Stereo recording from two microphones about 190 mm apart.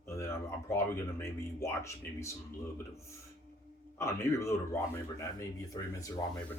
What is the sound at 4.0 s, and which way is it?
Speech, 15° left (ahead or behind).